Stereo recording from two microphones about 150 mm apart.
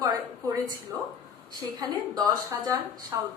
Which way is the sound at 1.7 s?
25° right (ahead or behind).